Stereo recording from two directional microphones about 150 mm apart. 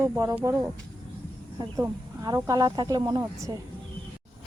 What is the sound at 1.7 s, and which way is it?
Speech, 25° right (ahead or behind).